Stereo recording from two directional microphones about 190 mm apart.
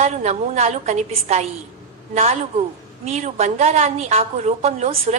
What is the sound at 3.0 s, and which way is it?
A woman's voice, 35° right (ahead or behind).